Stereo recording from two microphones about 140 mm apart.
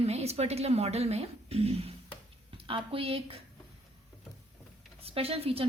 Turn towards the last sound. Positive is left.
turn(degrees=-45)  # may be behind; listen again after turning